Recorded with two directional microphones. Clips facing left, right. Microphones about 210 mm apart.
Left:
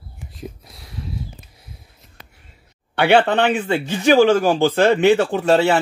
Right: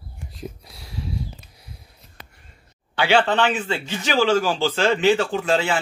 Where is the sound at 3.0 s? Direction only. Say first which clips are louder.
Left 4 dB; 60° left (ahead or behind).